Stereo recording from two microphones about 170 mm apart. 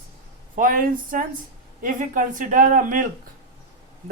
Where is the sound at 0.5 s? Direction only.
55° right (ahead or behind).